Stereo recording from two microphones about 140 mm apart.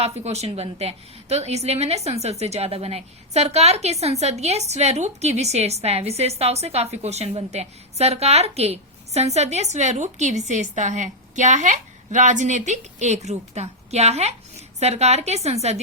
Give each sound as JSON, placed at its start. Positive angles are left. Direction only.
{"t": 0.0, "sound": "a woman's voice", "side_deg": -50}